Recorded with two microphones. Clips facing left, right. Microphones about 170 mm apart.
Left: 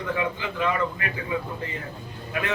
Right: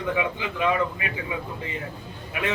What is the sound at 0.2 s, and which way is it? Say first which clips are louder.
Speech: right 1 dB; 15° right (ahead or behind).